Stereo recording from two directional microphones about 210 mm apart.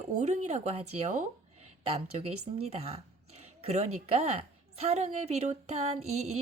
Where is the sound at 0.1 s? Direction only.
35° right (ahead or behind).